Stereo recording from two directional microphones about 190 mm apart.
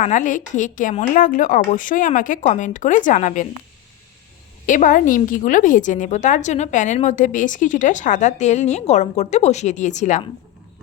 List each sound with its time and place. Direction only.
0.0 s a woman's voice: 40° left (ahead or behind)
4.6 s a woman's voice: 45° left (ahead or behind)